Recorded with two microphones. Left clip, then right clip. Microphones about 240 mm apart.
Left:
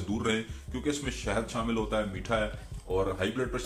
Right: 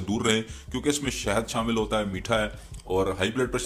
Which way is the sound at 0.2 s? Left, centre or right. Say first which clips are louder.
Right 6 dB; right.